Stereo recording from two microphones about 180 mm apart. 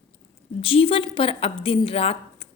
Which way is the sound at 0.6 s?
30° left (ahead or behind).